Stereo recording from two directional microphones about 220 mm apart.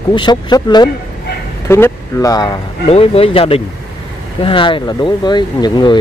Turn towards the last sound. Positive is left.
turn(degrees=20)  # may be behind; listen again after turning